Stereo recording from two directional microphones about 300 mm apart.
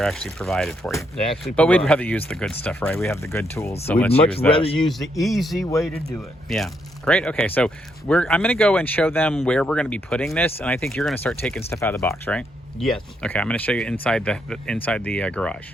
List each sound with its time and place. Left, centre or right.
0.0 s speech: centre
4.5 s speech: centre
4.8 s speech: centre